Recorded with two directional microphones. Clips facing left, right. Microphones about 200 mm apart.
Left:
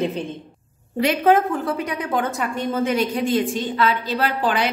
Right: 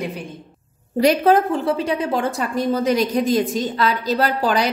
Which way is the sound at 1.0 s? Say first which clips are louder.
Right 2 dB; 35° right (ahead or behind).